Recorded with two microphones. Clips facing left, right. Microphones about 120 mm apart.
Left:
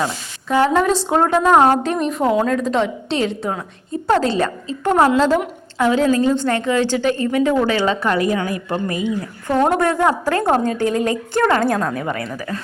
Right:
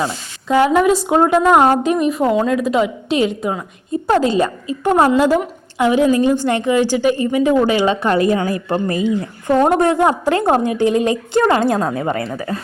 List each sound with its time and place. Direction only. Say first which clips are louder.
0.4 s a woman's voice: right 3 dB; 15° right (ahead or behind)
8.1 s a woman's voice: right 3 dB; 30° right (ahead or behind)
9.7 s a woman's voice: right 3 dB; 20° right (ahead or behind)